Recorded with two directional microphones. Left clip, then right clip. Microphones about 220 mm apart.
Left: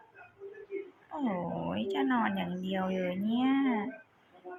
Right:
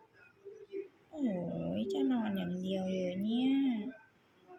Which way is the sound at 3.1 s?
20° left (ahead or behind).